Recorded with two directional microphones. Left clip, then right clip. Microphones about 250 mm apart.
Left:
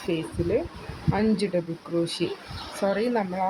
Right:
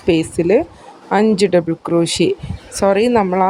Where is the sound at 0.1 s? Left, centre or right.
Right.